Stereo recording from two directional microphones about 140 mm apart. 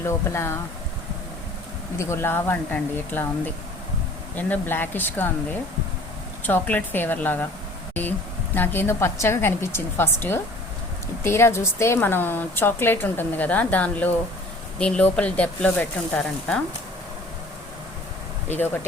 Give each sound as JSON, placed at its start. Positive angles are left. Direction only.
{"t": 0.0, "sound": "speech", "side_deg": 20}
{"t": 2.0, "sound": "a woman's voice", "side_deg": 20}
{"t": 6.4, "sound": "a woman's voice", "side_deg": 10}
{"t": 8.5, "sound": "a woman's voice", "side_deg": 15}
{"t": 18.4, "sound": "a woman's voice", "side_deg": 15}